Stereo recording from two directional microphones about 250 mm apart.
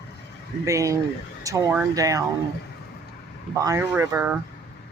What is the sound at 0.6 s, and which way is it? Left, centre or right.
Speech, centre.